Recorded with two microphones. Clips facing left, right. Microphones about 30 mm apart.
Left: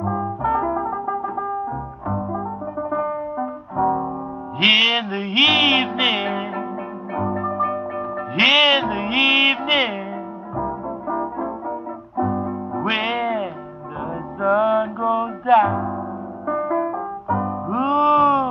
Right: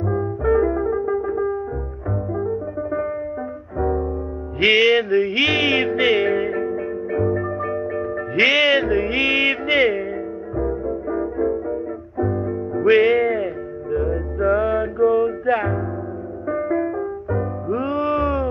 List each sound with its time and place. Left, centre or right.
0.0 s brass instrument: centre
2.3 s music: centre
10.5 s music: centre; by 18.5 s left